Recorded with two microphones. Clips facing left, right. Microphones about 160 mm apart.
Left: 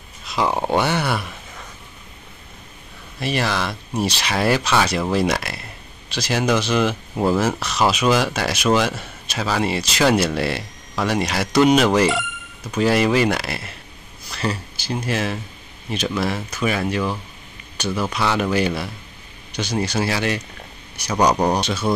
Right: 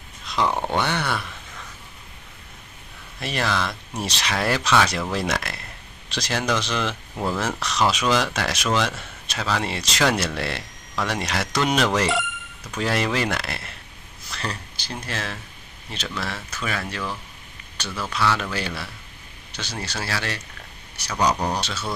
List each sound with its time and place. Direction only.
0.3 s speech: 10° left (ahead or behind)
3.2 s speech: 5° left (ahead or behind)